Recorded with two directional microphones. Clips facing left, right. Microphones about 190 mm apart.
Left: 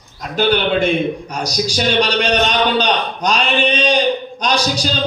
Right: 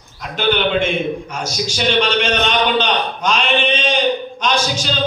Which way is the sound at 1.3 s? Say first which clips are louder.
Left 3 dB; 35° left (ahead or behind).